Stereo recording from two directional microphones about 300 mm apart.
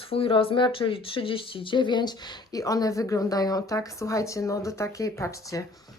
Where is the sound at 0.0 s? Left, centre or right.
Centre.